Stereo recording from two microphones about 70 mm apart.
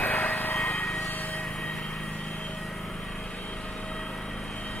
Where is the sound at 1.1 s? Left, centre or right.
Left.